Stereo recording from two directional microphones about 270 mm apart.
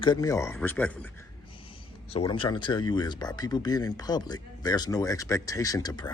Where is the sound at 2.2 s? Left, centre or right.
Centre.